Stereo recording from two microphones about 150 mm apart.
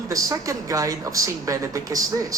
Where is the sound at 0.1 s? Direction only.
20° right (ahead or behind).